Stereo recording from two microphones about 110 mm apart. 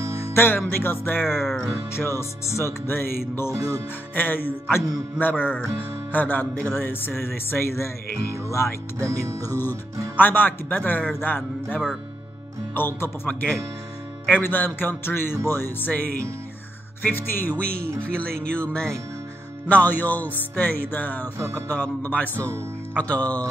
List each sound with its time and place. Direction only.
0.3 s music: 20° left (ahead or behind)
0.7 s speech: 20° left (ahead or behind)
1.4 s music: centre (ahead or behind)
2.1 s speech: 25° left (ahead or behind)
3.5 s speech: 30° right (ahead or behind)
4.1 s speech: 15° left (ahead or behind)
9.0 s music: 30° right (ahead or behind)
9.4 s speech: 20° left (ahead or behind)
22.3 s music: 25° right (ahead or behind)
22.9 s speech: 10° left (ahead or behind)